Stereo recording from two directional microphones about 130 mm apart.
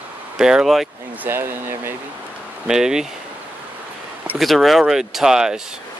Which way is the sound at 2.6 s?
5° right (ahead or behind).